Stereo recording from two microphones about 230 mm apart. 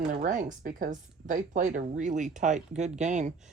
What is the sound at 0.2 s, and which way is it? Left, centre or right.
Speech, right.